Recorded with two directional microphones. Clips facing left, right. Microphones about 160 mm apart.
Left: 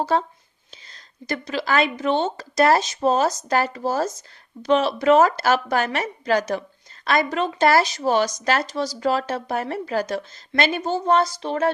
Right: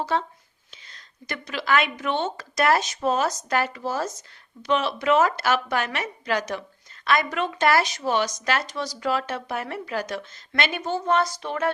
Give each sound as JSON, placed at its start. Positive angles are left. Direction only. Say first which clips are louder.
{"t": 0.0, "sound": "a woman's voice", "louder": "left 4 dB", "side_deg": 40}